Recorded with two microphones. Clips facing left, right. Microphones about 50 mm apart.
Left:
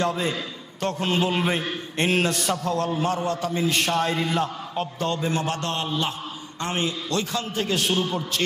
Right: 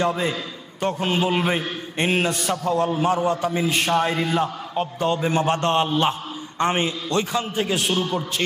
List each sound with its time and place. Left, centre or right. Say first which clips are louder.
0.0 s a man's voice: right 2 dB; centre
4.1 s a man's voice: right 2 dB; right
4.4 s a man's voice: right 3 dB; centre
5.2 s a man's voice: right 5 dB; right
7.9 s a man's voice: right 1 dB; right
8.4 s a man's voice: even; centre